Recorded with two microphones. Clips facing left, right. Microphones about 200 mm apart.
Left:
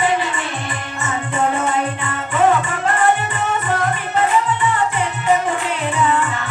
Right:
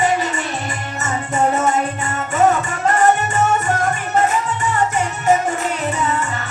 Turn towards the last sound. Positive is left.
turn(degrees=-40)  # may be behind; listen again after turning